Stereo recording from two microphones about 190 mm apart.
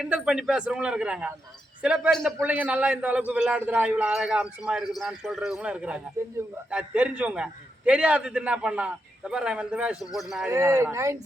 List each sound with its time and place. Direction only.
0.0 s a man's voice: 5° right (ahead or behind)
10.5 s speech: 15° right (ahead or behind)